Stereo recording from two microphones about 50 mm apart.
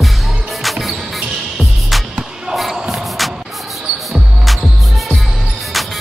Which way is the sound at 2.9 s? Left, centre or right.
Centre.